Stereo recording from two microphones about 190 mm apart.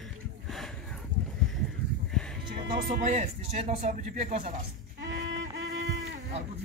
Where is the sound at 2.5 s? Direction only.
50° right (ahead or behind).